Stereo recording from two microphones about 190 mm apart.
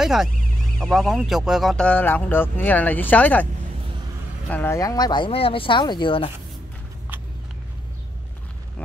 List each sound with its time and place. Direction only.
0.0 s speech: centre (ahead or behind)
4.5 s speech: 10° left (ahead or behind); by 6.3 s 25° left (ahead or behind)